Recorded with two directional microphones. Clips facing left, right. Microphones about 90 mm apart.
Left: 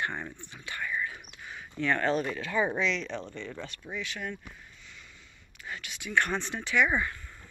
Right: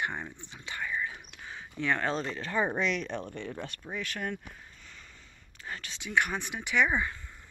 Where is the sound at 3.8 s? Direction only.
45° right (ahead or behind).